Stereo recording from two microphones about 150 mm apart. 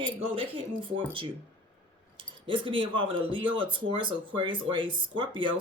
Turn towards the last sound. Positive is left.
turn(degrees=-35)  # may be behind; listen again after turning